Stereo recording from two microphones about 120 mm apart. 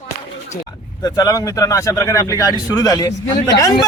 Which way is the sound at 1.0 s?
30° left (ahead or behind).